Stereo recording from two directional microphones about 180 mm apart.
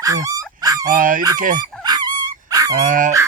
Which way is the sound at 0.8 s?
50° right (ahead or behind).